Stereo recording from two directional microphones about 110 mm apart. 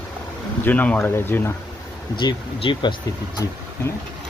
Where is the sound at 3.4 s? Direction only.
30° left (ahead or behind).